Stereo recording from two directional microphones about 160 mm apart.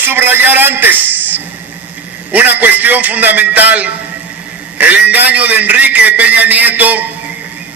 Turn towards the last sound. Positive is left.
turn(degrees=-10)  # may be behind; listen again after turning